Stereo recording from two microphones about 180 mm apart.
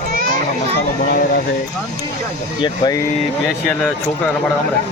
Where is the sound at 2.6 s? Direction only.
25° left (ahead or behind).